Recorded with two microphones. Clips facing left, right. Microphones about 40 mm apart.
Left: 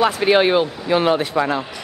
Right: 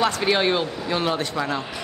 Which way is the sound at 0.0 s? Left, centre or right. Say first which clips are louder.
Left 5 dB; centre.